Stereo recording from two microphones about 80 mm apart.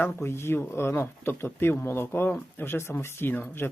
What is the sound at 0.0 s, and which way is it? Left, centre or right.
Speech, left.